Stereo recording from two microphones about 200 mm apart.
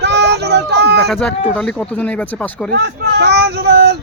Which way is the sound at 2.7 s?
55° right (ahead or behind).